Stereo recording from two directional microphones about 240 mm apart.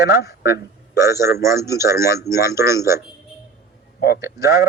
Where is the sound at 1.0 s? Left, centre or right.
Centre.